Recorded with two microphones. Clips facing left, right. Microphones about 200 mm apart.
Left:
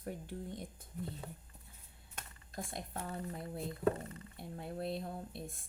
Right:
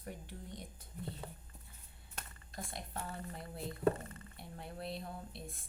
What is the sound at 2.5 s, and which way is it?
Speech, 50° left (ahead or behind).